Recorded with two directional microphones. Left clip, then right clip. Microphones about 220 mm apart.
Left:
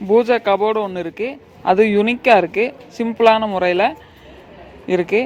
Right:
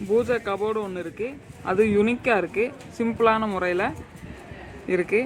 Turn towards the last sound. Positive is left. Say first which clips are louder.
# left 6 dB
turn(degrees=20)  # may be behind; listen again after turning